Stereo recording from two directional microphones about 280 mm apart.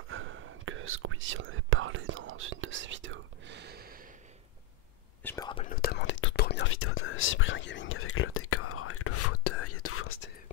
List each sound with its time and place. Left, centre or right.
0.1 s whispering: right
5.2 s speech: centre
5.7 s whispering: left